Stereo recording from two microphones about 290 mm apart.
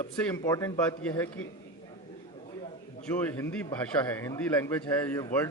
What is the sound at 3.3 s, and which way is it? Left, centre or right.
A man's voice, centre.